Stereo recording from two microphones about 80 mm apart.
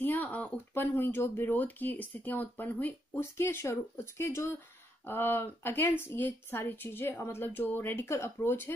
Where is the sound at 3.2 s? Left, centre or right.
Left.